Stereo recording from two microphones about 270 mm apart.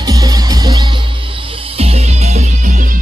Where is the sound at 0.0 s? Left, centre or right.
Centre.